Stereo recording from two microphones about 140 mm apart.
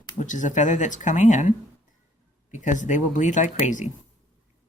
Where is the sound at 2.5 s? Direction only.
60° left (ahead or behind).